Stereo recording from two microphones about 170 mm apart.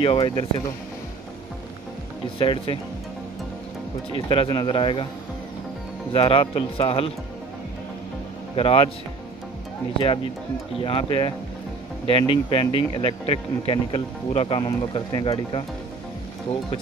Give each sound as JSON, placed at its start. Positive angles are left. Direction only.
{"t": 0.0, "sound": "speech", "side_deg": 30}
{"t": 2.3, "sound": "speech", "side_deg": 30}
{"t": 4.3, "sound": "speech", "side_deg": 30}
{"t": 6.1, "sound": "speech", "side_deg": 35}
{"t": 8.5, "sound": "speech", "side_deg": 35}
{"t": 10.8, "sound": "speech", "side_deg": 30}